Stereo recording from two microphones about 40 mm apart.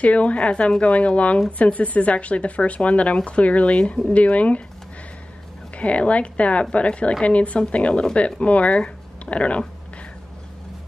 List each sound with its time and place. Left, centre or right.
0.0 s speech: left
3.7 s speech: left
4.1 s speech: left
5.8 s speech: left